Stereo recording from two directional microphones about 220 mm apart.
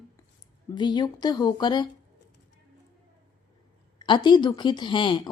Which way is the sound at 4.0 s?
20° left (ahead or behind).